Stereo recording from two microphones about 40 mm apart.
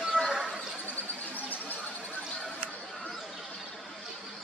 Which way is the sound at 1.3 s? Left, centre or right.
Left.